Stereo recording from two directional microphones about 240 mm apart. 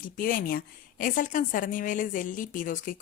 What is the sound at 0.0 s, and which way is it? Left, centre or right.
A woman's voice, left.